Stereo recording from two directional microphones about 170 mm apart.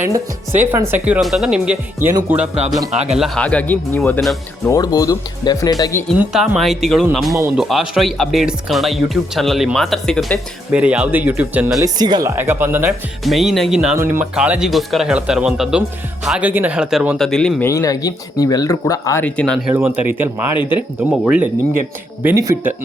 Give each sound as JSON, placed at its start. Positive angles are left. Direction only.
{"t": 0.0, "sound": "speech", "side_deg": -10}
{"t": 3.2, "sound": "speech", "side_deg": 5}
{"t": 4.6, "sound": "speech", "side_deg": 20}
{"t": 6.1, "sound": "speech", "side_deg": -5}
{"t": 7.3, "sound": "speech", "side_deg": -15}
{"t": 7.6, "sound": "speech", "side_deg": 0}
{"t": 11.9, "sound": "speech", "side_deg": -25}
{"t": 12.4, "sound": "speech", "side_deg": -15}
{"t": 13.2, "sound": "speech", "side_deg": 0}
{"t": 17.7, "sound": "speech", "side_deg": 20}
{"t": 19.2, "sound": "speech", "side_deg": 5}
{"t": 19.6, "sound": "speech", "side_deg": -10}